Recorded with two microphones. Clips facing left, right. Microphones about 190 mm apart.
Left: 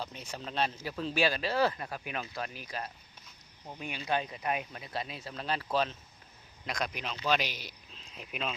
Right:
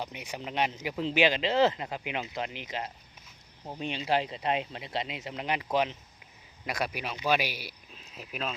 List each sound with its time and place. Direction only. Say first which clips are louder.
0.0 s speech: right 3 dB; 15° right (ahead or behind)